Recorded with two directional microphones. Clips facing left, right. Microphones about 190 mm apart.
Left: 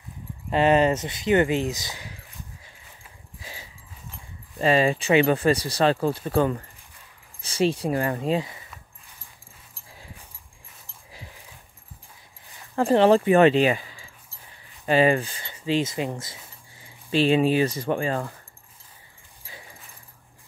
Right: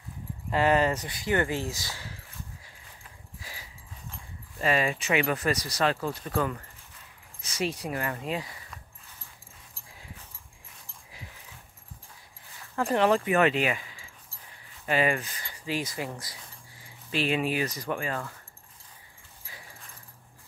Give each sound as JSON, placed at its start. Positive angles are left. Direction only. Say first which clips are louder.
{"t": 0.5, "sound": "speech", "louder": "left 5 dB", "side_deg": 20}
{"t": 3.3, "sound": "dog", "louder": "left 4 dB", "side_deg": 25}
{"t": 4.6, "sound": "speech", "louder": "left 6 dB", "side_deg": 30}
{"t": 12.7, "sound": "speech", "louder": "left 6 dB", "side_deg": 30}